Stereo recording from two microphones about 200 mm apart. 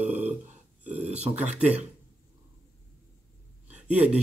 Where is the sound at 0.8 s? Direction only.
35° right (ahead or behind).